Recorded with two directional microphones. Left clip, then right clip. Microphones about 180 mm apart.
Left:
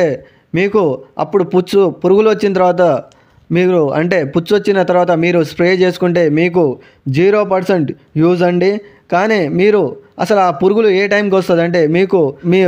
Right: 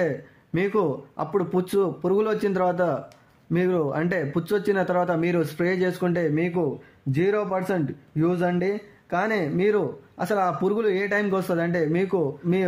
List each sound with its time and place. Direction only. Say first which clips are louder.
0.0 s speech: left 11 dB; 40° left (ahead or behind)